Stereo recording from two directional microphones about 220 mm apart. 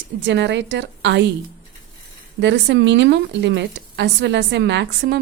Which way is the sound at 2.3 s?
55° right (ahead or behind).